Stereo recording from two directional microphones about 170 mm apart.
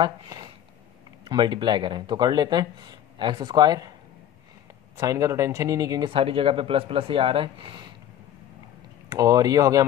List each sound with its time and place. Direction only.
0.0 s speech: 25° right (ahead or behind)
4.9 s speech: 20° right (ahead or behind)
9.1 s speech: 20° right (ahead or behind)